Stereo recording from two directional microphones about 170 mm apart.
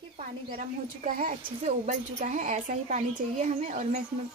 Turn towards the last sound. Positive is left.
turn(degrees=-45)  # may be behind; listen again after turning